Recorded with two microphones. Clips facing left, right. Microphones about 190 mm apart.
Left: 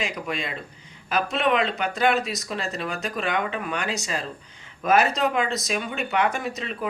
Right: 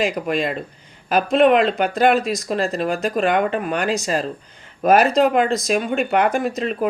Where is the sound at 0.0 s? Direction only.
50° right (ahead or behind).